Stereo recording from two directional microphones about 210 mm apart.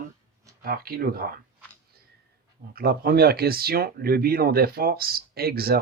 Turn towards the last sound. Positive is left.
turn(degrees=-45)  # may be behind; listen again after turning